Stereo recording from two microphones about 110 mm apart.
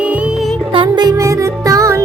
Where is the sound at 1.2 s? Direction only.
30° right (ahead or behind).